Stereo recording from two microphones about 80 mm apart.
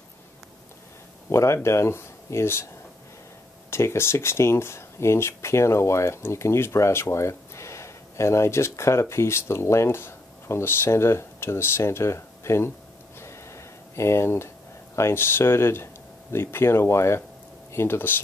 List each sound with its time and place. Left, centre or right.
1.3 s speech: left
3.7 s speech: left
13.2 s a sound: left
15.0 s speech: left